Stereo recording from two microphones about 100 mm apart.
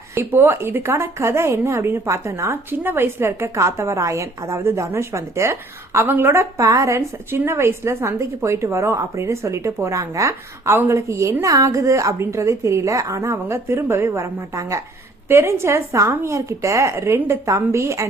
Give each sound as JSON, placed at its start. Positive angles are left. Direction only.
{"t": 0.1, "sound": "a woman's voice", "side_deg": -25}